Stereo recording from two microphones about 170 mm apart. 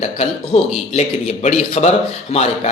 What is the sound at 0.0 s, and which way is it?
Speech, 40° left (ahead or behind).